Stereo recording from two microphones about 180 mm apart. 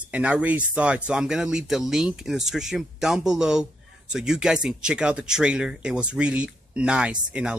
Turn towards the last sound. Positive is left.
turn(degrees=-5)  # may be behind; listen again after turning